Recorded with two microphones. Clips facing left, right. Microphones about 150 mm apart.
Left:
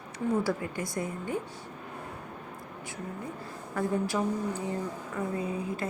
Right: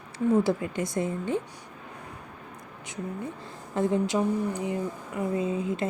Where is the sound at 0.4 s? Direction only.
20° right (ahead or behind).